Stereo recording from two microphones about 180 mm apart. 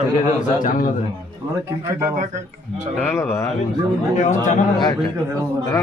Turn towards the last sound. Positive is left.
turn(degrees=45)  # may be behind; listen again after turning